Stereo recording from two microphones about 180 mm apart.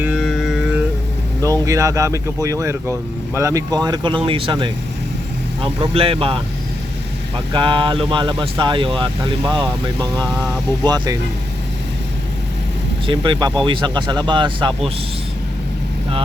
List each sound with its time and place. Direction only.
0.0 s music: 5° right (ahead or behind)
1.4 s speech: 20° right (ahead or behind)
13.1 s speech: 25° right (ahead or behind)